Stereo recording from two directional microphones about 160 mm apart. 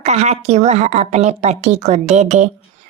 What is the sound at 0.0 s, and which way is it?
Speech, 45° right (ahead or behind).